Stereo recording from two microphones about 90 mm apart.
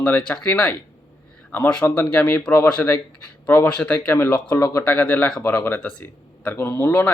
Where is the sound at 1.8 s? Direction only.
25° left (ahead or behind).